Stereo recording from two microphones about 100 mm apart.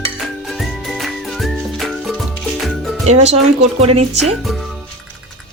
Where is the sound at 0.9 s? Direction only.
Centre (ahead or behind).